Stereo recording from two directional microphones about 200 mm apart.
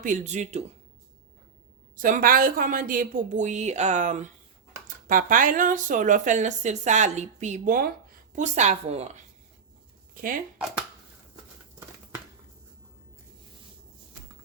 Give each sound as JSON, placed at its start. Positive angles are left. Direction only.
{"t": 0.0, "sound": "speech", "side_deg": -40}
{"t": 2.0, "sound": "speech", "side_deg": -45}
{"t": 10.2, "sound": "speech", "side_deg": -45}